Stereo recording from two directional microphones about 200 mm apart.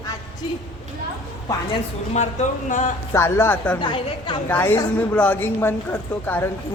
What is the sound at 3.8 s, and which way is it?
Speech, 25° left (ahead or behind).